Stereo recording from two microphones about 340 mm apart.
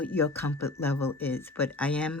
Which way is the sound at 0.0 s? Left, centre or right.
Centre.